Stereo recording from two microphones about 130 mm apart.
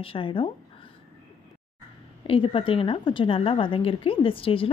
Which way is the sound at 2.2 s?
45° left (ahead or behind).